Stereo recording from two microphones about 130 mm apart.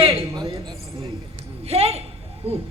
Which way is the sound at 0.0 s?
50° right (ahead or behind).